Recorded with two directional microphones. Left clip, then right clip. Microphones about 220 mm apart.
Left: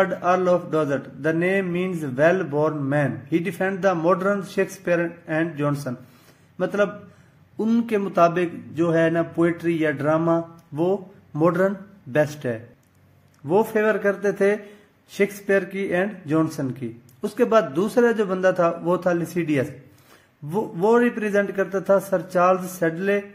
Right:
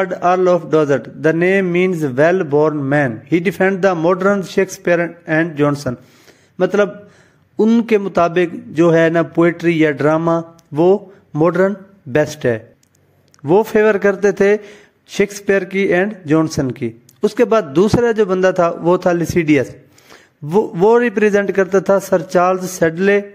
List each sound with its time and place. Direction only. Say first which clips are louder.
0.0 s a man's voice: right 6 dB; 40° right (ahead or behind)